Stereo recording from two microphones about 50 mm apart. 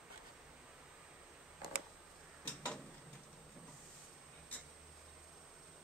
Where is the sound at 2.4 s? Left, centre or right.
Left.